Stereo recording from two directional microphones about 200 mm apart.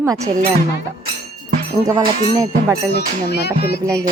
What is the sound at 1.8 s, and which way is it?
Music, 20° right (ahead or behind).